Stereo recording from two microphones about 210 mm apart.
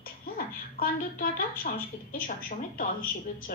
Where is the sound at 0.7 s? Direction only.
45° left (ahead or behind).